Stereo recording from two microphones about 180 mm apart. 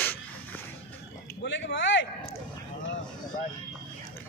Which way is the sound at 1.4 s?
85° left.